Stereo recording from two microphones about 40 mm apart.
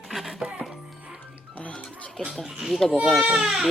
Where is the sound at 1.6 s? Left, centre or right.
Left.